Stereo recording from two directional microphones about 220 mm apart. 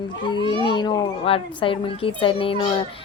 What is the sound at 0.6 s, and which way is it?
A woman's voice, 20° left (ahead or behind).